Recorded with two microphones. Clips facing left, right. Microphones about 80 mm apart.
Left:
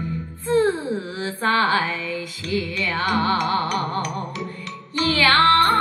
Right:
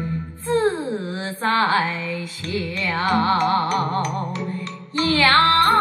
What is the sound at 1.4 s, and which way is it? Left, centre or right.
Music, right.